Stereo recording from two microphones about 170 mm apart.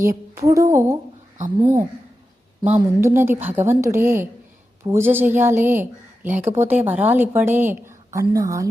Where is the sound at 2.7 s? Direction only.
15° right (ahead or behind).